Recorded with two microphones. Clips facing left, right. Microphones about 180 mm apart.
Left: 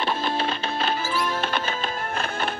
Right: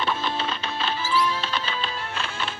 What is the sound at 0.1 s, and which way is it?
Music, 50° left (ahead or behind).